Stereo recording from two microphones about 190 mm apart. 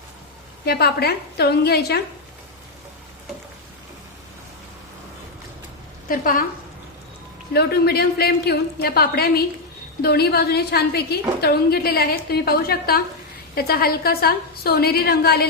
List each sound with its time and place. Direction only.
0.6 s a woman's voice: 55° left (ahead or behind)
6.1 s a woman's voice: 45° left (ahead or behind)
7.5 s a woman's voice: 55° left (ahead or behind)